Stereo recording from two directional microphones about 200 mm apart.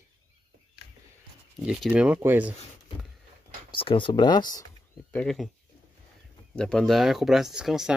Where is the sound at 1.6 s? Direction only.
5° right (ahead or behind).